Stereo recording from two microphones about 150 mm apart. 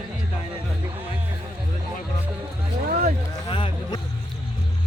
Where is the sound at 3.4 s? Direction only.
30° left (ahead or behind).